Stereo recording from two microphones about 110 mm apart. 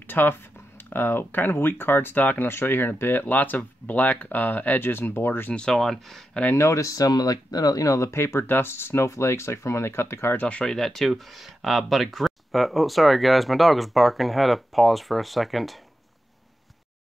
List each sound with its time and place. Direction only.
0.0 s speech: 20° left (ahead or behind)
5.5 s speech: 5° left (ahead or behind)
6.5 s speech: 25° left (ahead or behind); by 15.8 s centre (ahead or behind)